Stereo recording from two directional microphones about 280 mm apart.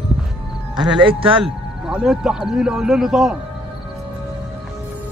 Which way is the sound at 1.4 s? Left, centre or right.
Centre.